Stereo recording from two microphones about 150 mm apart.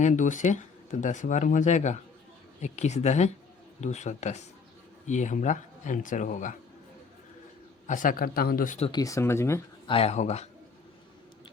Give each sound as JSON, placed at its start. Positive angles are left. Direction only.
{"t": 0.0, "sound": "speech", "side_deg": 55}
{"t": 7.9, "sound": "speech", "side_deg": 60}
{"t": 8.9, "sound": "speech", "side_deg": 25}
{"t": 9.8, "sound": "speech", "side_deg": 40}